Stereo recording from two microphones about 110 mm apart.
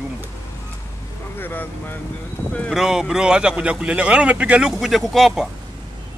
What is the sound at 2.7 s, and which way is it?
Speech, 5° right (ahead or behind).